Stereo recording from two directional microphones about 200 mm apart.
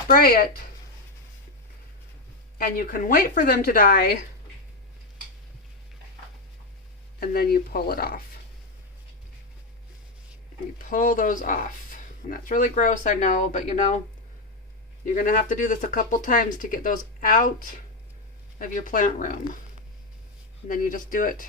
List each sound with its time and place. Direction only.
0.1 s speech: 50° left (ahead or behind)
2.6 s speech: 45° left (ahead or behind)
7.2 s speech: 50° left (ahead or behind)
10.8 s speech: 40° left (ahead or behind)
15.0 s speech: 40° left (ahead or behind)
20.7 s speech: 40° left (ahead or behind)